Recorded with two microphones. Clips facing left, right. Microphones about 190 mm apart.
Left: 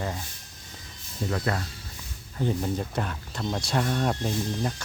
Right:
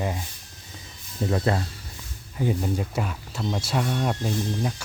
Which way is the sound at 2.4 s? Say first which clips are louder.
Right 2 dB; 10° right (ahead or behind).